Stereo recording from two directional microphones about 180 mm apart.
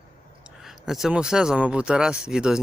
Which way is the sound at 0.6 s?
Centre (ahead or behind).